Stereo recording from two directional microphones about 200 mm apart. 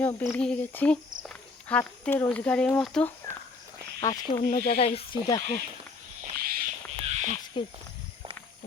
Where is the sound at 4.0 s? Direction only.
15° left (ahead or behind).